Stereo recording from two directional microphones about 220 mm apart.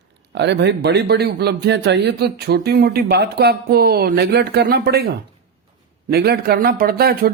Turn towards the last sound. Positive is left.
turn(degrees=-45)  # may be behind; listen again after turning